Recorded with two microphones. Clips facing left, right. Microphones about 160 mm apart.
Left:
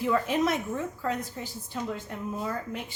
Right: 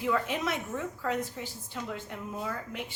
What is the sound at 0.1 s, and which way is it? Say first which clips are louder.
Speech: left 4 dB; 40° left (ahead or behind).